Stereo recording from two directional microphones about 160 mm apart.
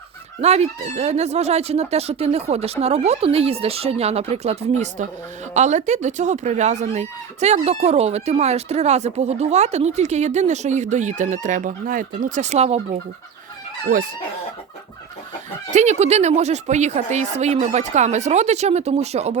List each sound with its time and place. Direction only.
0.4 s speech: 45° right (ahead or behind)
15.7 s speech: 45° right (ahead or behind)